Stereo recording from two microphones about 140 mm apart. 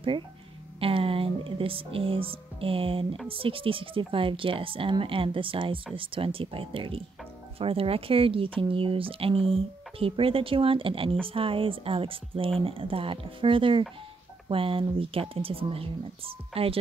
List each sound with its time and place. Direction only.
0.7 s speech: 40° right (ahead or behind)